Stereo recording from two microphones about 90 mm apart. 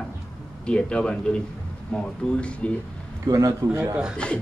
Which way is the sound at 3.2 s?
35° right (ahead or behind).